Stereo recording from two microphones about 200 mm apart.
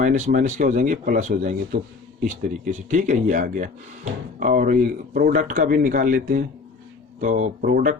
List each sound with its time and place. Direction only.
0.0 s speech: 40° right (ahead or behind)